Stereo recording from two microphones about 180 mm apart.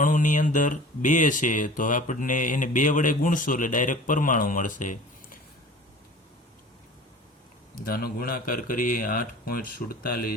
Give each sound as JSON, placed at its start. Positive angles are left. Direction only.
{"t": 0.0, "sound": "speech", "side_deg": 45}
{"t": 7.9, "sound": "speech", "side_deg": 55}